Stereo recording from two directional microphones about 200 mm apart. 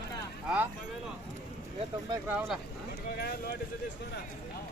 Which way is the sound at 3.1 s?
50° left (ahead or behind).